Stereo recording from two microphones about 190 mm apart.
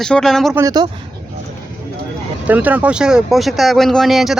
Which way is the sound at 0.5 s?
20° right (ahead or behind).